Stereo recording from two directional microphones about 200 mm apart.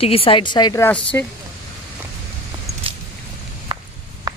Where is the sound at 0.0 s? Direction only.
30° left (ahead or behind); by 1.3 s 10° left (ahead or behind).